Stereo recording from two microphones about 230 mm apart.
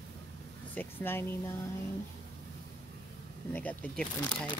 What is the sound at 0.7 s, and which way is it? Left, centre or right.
Speech, centre.